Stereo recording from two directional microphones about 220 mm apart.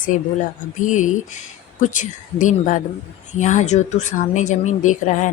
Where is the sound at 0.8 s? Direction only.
35° left (ahead or behind).